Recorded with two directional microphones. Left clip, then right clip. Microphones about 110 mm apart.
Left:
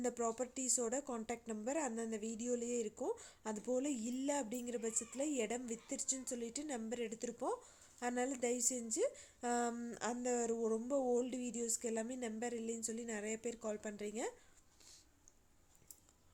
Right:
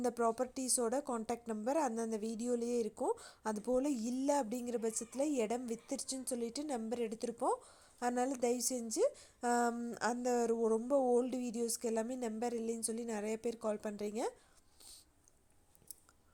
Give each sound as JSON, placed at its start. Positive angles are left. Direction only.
{"t": 0.0, "sound": "a woman's voice", "side_deg": -30}
{"t": 9.7, "sound": "speech", "side_deg": -20}
{"t": 10.0, "sound": "a woman's voice", "side_deg": -35}